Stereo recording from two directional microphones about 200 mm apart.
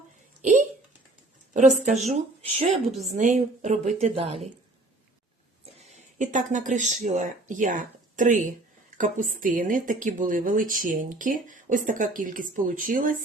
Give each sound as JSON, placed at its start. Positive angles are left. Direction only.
{"t": 0.4, "sound": "a sound", "side_deg": -40}
{"t": 1.5, "sound": "a woman's voice", "side_deg": -40}
{"t": 3.0, "sound": "a woman's voice", "side_deg": -35}
{"t": 6.1, "sound": "a woman's voice", "side_deg": -40}